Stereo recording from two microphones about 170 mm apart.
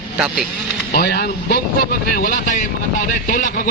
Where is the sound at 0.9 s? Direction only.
65° left (ahead or behind).